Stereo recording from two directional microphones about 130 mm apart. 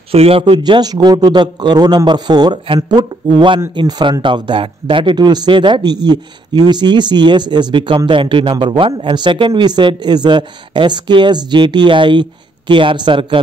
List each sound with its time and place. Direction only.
0.1 s a man's voice: 45° right (ahead or behind)
0.6 s speech: 30° right (ahead or behind)